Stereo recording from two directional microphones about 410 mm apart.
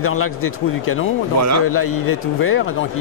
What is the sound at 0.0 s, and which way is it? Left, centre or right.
Speech, left.